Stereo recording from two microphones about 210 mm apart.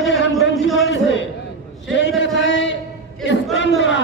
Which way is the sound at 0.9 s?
60° left (ahead or behind).